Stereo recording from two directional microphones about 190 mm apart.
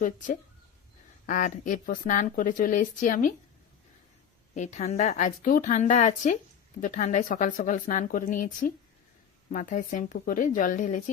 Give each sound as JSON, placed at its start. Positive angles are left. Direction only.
{"t": 0.0, "sound": "speech", "side_deg": 45}
{"t": 4.5, "sound": "a woman's voice", "side_deg": 40}